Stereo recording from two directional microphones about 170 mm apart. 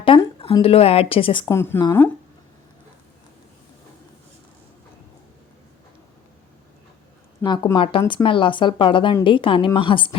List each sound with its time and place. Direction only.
0.1 s a sound: 30° left (ahead or behind)
0.4 s a woman's voice: 35° left (ahead or behind)
1.5 s speech: 15° left (ahead or behind)
7.4 s a woman's voice: 25° left (ahead or behind)